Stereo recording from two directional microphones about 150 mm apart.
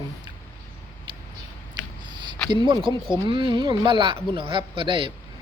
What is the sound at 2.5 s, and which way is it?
A man's voice, 30° right (ahead or behind).